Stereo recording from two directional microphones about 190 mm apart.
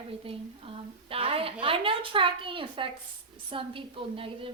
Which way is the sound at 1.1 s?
30° right (ahead or behind).